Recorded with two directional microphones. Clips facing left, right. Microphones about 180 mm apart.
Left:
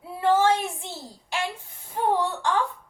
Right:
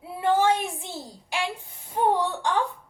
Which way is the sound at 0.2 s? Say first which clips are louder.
Left 1 dB; 15° right (ahead or behind).